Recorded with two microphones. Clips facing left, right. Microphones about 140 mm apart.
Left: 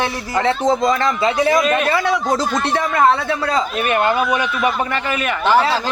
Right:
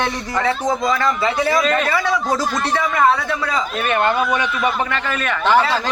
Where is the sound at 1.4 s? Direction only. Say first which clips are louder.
Left 2 dB; 20° left (ahead or behind).